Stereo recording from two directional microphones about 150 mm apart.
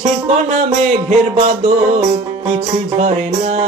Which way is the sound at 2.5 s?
45° right (ahead or behind).